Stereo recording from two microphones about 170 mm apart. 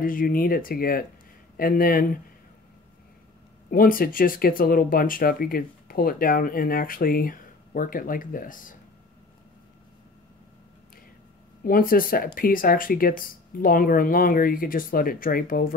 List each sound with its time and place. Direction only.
0.0 s speech: 55° left (ahead or behind)
3.7 s speech: 60° left (ahead or behind)
11.6 s speech: 55° left (ahead or behind)